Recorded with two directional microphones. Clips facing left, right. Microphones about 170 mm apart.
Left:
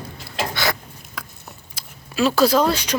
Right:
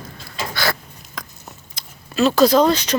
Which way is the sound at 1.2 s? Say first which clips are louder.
Right 1 dB; 10° left (ahead or behind).